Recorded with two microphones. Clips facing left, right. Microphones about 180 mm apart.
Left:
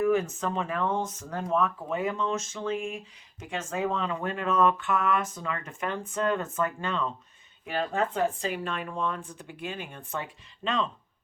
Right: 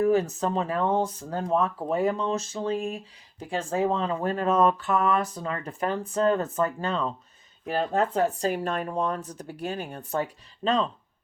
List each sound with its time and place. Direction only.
0.0 s speech: 35° right (ahead or behind)